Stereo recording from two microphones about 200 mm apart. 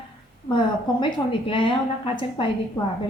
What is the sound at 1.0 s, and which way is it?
A woman's voice, 25° left (ahead or behind).